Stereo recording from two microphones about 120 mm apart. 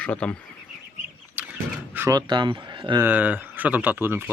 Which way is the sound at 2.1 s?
35° right (ahead or behind).